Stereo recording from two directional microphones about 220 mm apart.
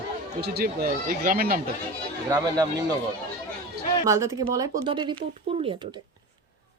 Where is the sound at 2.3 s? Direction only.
15° right (ahead or behind).